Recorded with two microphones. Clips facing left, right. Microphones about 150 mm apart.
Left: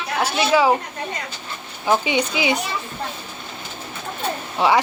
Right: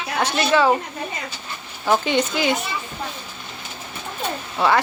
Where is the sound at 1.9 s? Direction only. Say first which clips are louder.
Even; 10° left (ahead or behind).